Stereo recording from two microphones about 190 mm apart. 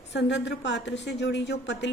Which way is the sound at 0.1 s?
65° left (ahead or behind).